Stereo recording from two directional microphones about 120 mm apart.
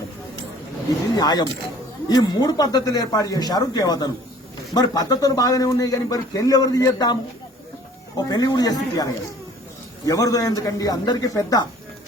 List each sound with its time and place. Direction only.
1.1 s speech: 35° left (ahead or behind)
8.2 s speech: 30° left (ahead or behind)